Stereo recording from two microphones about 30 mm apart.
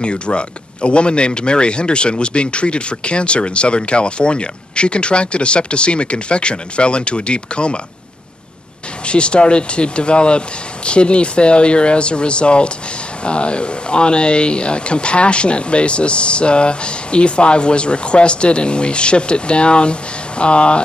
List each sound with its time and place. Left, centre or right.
0.0 s speech: left
9.0 s speech: left